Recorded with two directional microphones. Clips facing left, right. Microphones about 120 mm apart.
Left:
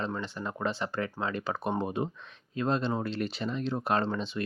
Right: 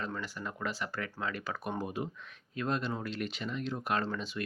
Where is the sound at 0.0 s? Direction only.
25° left (ahead or behind).